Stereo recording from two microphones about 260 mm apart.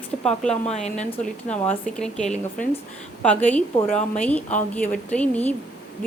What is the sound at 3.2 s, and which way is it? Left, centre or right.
Speech, centre.